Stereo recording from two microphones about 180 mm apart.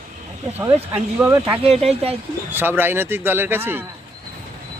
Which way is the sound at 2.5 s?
10° right (ahead or behind).